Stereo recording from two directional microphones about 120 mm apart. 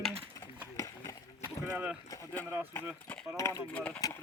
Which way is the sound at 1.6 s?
15° right (ahead or behind).